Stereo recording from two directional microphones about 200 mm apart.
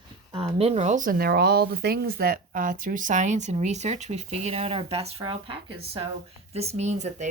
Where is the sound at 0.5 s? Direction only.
30° right (ahead or behind).